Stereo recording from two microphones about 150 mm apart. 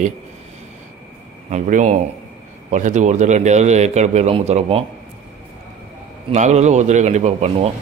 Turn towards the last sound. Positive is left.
turn(degrees=-45)  # may be behind; listen again after turning